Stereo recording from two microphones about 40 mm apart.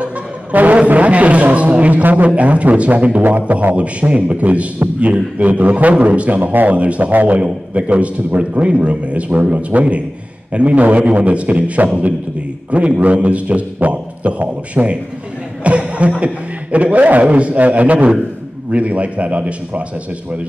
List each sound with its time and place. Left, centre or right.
0.0 s music: right
0.8 s a sound: right
2.2 s a man's voice: right
7.1 s a man's voice: right
7.3 s a man's voice: right